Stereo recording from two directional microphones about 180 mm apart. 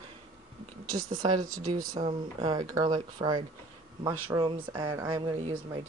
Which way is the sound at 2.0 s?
30° right (ahead or behind).